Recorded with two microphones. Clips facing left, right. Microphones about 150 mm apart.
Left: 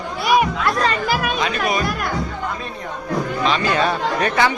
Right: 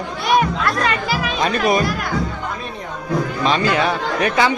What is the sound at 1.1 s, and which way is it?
Music, 50° left (ahead or behind).